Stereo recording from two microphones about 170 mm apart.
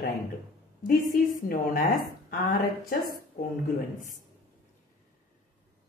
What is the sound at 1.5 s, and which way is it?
A woman's voice, 60° left (ahead or behind).